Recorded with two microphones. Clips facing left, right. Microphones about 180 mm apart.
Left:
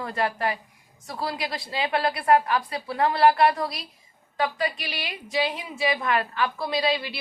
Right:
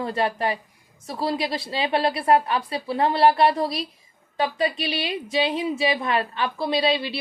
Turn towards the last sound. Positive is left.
turn(degrees=-25)  # may be behind; listen again after turning